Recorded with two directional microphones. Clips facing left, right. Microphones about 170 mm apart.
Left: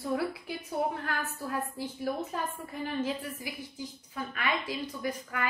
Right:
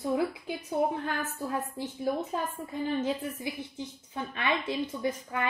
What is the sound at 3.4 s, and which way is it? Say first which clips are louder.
A woman's voice: right 4 dB; 25° right (ahead or behind).